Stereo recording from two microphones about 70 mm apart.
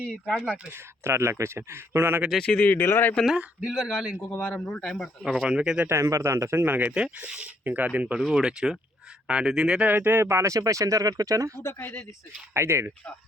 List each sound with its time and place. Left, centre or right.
0.1 s a man's voice: centre
0.7 s speech: right
2.4 s speech: centre
2.8 s speech: left
3.2 s speech: centre
3.8 s a man's voice: centre
4.4 s speech: centre
5.2 s speech: centre
5.9 s speech: right
6.9 s speech: centre
8.2 s speech: centre
9.8 s speech: right
11.7 s speech: left
12.5 s speech: right